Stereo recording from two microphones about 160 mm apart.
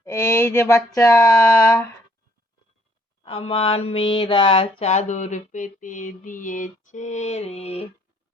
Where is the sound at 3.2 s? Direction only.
40° left (ahead or behind).